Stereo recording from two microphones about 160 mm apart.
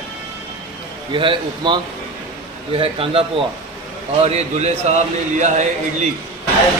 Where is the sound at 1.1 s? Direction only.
30° right (ahead or behind).